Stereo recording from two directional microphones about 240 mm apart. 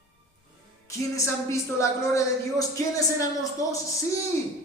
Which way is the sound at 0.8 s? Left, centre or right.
Centre.